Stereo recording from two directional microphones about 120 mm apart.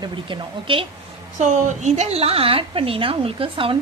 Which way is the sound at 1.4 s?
80° right.